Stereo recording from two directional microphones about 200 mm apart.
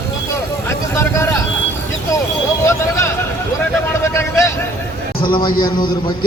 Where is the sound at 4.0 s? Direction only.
15° left (ahead or behind).